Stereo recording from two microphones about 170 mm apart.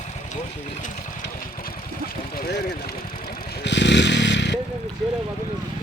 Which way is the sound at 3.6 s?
90° left.